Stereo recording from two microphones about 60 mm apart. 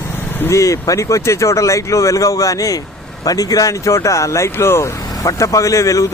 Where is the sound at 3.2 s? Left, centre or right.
Left.